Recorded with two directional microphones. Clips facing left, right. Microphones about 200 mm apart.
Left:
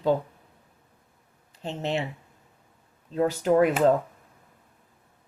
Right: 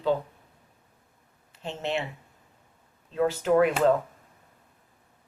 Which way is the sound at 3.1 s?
40° left (ahead or behind).